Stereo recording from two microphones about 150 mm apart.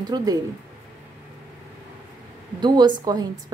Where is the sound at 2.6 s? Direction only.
30° right (ahead or behind).